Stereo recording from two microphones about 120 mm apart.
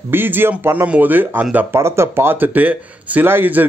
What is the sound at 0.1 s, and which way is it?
Speech, 15° right (ahead or behind).